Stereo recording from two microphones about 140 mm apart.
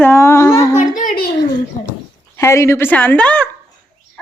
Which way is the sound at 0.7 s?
65° left (ahead or behind).